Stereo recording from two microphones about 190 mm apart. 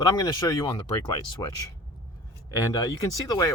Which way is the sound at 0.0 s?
20° left (ahead or behind).